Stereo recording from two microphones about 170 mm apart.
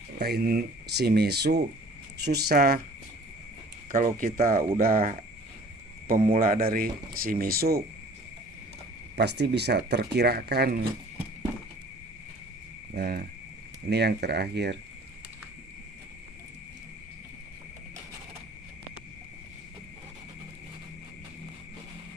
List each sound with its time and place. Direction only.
0.2 s speech: 70° right (ahead or behind)
3.9 s speech: 55° right (ahead or behind)
6.4 s speech: 60° right (ahead or behind)
9.1 s speech: 75° right (ahead or behind)
12.9 s speech: 65° right (ahead or behind)
13.9 s speech: 75° right (ahead or behind)